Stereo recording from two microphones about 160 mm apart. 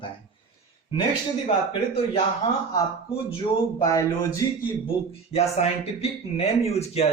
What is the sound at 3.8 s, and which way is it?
Speech, 20° left (ahead or behind).